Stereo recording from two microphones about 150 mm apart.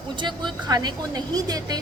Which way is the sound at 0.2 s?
30° right (ahead or behind).